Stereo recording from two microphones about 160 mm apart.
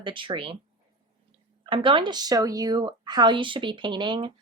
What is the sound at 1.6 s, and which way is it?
Speech, 30° right (ahead or behind).